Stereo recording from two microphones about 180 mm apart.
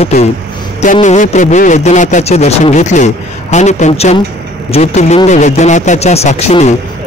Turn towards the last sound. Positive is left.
turn(degrees=35)  # may be behind; listen again after turning